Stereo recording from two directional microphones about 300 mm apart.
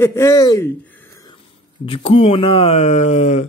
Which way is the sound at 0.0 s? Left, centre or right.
Centre.